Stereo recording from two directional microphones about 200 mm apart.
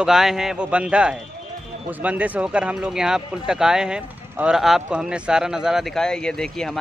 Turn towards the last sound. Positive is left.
turn(degrees=5)  # may be behind; listen again after turning